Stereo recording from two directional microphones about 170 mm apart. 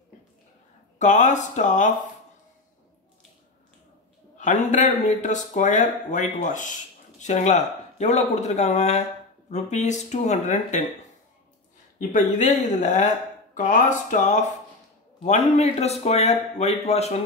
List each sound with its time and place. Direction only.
0.9 s speech: 45° left (ahead or behind)
4.4 s a man's voice: 45° left (ahead or behind)
12.0 s a man's voice: 50° left (ahead or behind)